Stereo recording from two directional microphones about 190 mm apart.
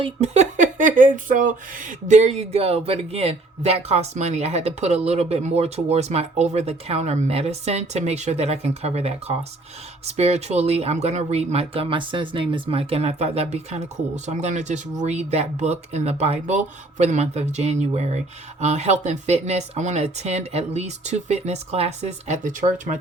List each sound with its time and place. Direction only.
0.0 s speech: 35° right (ahead or behind)